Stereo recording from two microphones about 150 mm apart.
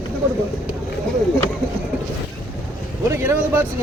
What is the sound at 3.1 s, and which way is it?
Speech, 15° right (ahead or behind).